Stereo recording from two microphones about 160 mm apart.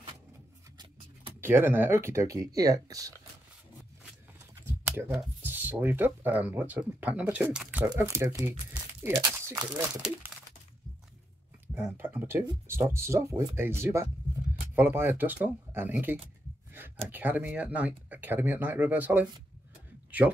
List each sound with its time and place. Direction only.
1.4 s speech: 15° right (ahead or behind)
4.6 s computer keyboard: 15° right (ahead or behind)
5.4 s speech: 10° right (ahead or behind)
11.6 s speech: 15° right (ahead or behind)